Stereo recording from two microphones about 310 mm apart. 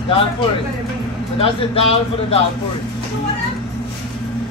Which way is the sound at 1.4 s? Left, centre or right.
Centre.